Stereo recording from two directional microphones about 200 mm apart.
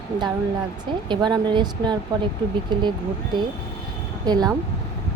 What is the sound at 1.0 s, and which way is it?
Speech, 20° right (ahead or behind).